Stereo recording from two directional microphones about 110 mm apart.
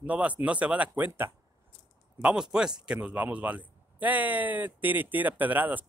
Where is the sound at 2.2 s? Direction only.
10° right (ahead or behind).